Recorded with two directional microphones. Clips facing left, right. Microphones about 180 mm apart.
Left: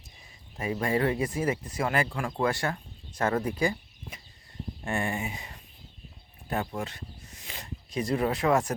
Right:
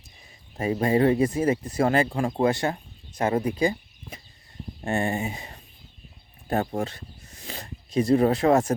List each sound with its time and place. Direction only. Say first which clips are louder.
0.5 s speech: right 6 dB; 30° right (ahead or behind)
6.8 s speech: right 4 dB; 30° right (ahead or behind)